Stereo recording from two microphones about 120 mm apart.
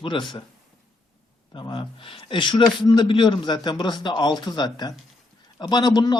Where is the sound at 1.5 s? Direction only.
40° left (ahead or behind).